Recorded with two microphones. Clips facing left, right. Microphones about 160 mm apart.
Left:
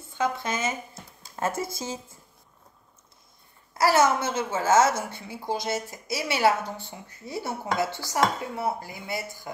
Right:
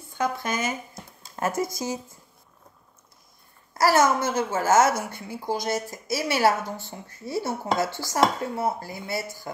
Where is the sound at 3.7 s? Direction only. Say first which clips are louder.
Right 1 dB; 20° left (ahead or behind).